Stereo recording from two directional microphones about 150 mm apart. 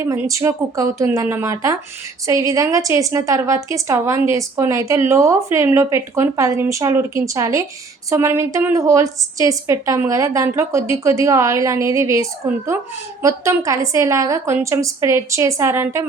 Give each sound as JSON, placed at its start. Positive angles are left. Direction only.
{"t": 0.0, "sound": "a woman's voice", "side_deg": -20}